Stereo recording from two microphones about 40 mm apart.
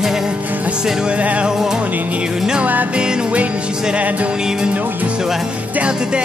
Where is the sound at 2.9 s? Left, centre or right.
Right.